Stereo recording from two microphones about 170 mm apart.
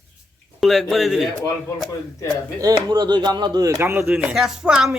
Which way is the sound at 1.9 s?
20° left (ahead or behind).